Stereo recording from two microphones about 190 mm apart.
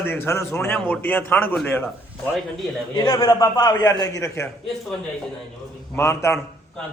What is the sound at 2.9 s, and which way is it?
A man's voice, 25° left (ahead or behind).